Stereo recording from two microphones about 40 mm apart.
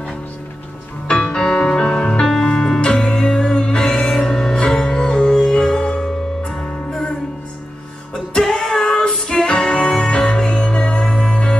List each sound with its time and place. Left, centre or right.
1.2 s music: centre
8.1 s music: centre
8.8 s female singing: centre
9.5 s music: left